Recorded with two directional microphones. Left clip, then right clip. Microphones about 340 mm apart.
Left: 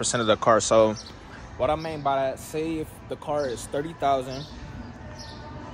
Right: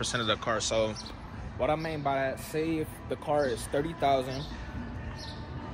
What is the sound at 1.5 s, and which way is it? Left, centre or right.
Speech, centre.